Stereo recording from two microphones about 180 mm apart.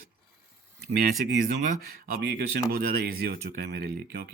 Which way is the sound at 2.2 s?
60° right (ahead or behind).